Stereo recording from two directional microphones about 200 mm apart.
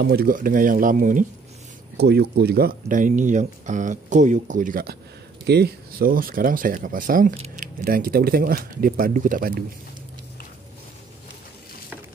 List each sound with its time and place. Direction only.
0.0 s speech: 50° right (ahead or behind)
2.0 s speech: 55° right (ahead or behind)